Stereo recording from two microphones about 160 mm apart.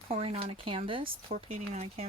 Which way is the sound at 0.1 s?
35° right (ahead or behind).